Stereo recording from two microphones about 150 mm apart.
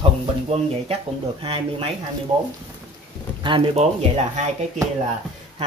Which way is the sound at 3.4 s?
35° right (ahead or behind).